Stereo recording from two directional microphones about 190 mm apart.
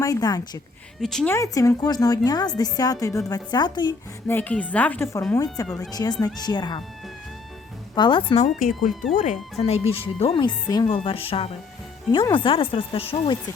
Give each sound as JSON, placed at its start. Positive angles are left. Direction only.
{"t": 0.0, "sound": "speech", "side_deg": 20}
{"t": 1.0, "sound": "a woman's voice", "side_deg": 5}
{"t": 1.4, "sound": "speech", "side_deg": 15}
{"t": 4.3, "sound": "speech", "side_deg": 10}
{"t": 5.6, "sound": "a woman's voice", "side_deg": 5}
{"t": 5.9, "sound": "speech", "side_deg": 20}
{"t": 7.9, "sound": "speech", "side_deg": 25}
{"t": 9.1, "sound": "speech", "side_deg": 40}